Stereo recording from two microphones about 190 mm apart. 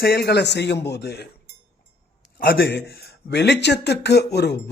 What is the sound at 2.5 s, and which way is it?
Speech, 55° left (ahead or behind).